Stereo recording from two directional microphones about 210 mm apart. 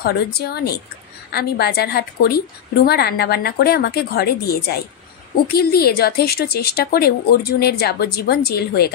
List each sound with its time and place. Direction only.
0.0 s a woman's voice: 50° left (ahead or behind)